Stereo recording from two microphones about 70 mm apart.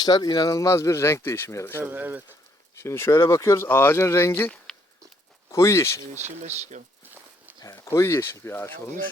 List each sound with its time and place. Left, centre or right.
0.0 s speech: left
1.8 s speech: right
2.7 s speech: left
5.5 s speech: left
7.6 s speech: left